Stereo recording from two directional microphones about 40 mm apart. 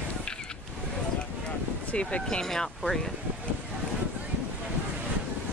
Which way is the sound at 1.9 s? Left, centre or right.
Left.